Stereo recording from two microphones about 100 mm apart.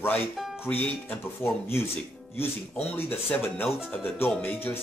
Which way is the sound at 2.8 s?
20° left (ahead or behind).